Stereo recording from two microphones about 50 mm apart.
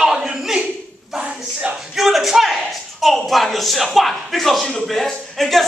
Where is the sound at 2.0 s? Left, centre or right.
Centre.